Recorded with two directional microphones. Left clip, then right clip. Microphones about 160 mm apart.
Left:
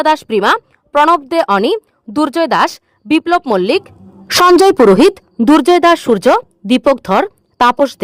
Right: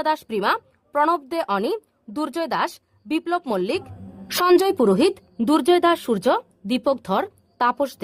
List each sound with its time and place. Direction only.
0.0 s a woman's voice: 50° left (ahead or behind)